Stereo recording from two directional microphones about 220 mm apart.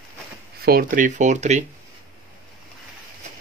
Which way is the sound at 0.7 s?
40° right (ahead or behind).